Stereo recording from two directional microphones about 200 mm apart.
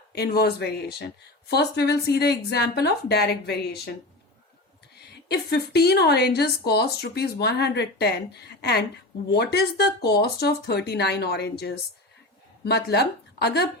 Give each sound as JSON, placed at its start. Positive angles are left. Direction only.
{"t": 0.1, "sound": "speech", "side_deg": 50}
{"t": 5.3, "sound": "speech", "side_deg": 50}